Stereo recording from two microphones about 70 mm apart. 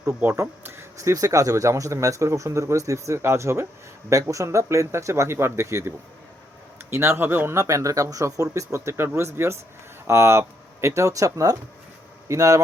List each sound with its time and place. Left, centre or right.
0.3 s speech: right
0.9 s speech: right
6.9 s speech: right
7.5 s speech: right